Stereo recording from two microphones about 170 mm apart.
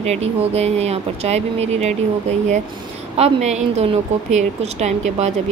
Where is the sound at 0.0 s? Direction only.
40° right (ahead or behind).